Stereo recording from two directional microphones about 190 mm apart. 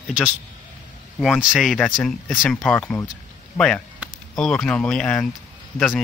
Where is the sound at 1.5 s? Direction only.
Centre (ahead or behind).